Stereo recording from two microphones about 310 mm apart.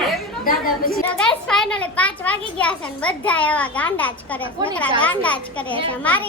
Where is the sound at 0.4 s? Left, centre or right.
Left.